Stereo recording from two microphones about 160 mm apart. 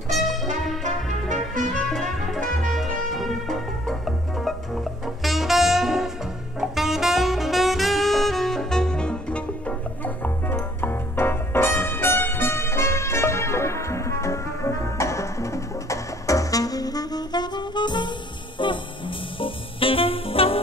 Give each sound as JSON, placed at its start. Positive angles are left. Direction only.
{"t": 0.1, "sound": "brass instrument", "side_deg": 0}
{"t": 1.8, "sound": "music", "side_deg": 0}
{"t": 6.6, "sound": "saxophone", "side_deg": 0}
{"t": 18.6, "sound": "music", "side_deg": 30}